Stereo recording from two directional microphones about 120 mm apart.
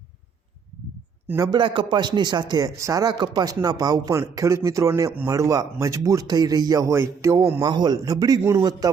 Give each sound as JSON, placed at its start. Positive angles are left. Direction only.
{"t": 1.4, "sound": "a man's voice", "side_deg": -40}